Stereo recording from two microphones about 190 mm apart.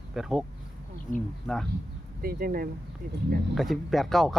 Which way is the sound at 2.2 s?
50° right (ahead or behind).